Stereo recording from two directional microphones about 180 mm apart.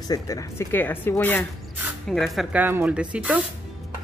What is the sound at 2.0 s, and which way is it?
Speech, centre (ahead or behind).